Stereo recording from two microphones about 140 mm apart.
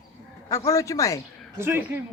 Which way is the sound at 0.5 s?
25° left (ahead or behind).